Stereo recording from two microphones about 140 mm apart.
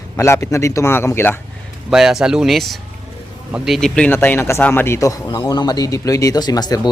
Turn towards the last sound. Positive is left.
turn(degrees=30)  # may be behind; listen again after turning